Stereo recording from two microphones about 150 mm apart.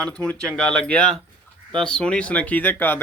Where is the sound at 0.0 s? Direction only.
5° left (ahead or behind).